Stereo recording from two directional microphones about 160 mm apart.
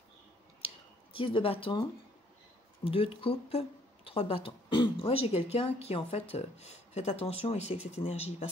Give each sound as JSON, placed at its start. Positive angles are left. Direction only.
{"t": 1.1, "sound": "speech", "side_deg": 35}
{"t": 7.7, "sound": "speech", "side_deg": -10}
{"t": 8.0, "sound": "speech", "side_deg": 40}